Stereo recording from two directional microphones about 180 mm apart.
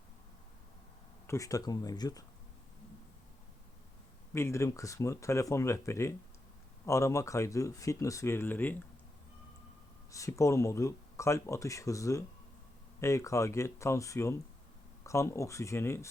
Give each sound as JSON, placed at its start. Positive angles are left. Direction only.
{"t": 1.3, "sound": "speech", "side_deg": 20}
{"t": 4.4, "sound": "speech", "side_deg": 15}
{"t": 10.1, "sound": "speech", "side_deg": 15}